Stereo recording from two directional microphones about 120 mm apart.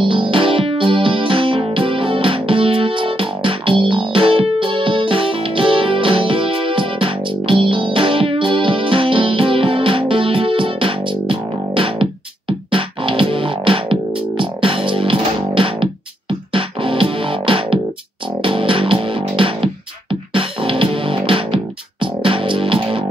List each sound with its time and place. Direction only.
0.0 s music: 45° right (ahead or behind)